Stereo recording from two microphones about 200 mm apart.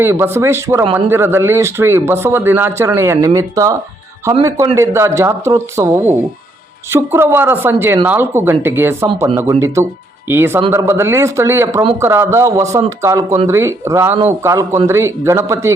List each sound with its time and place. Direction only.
0.0 s speech: 10° right (ahead or behind)
9.0 s speech: 25° right (ahead or behind)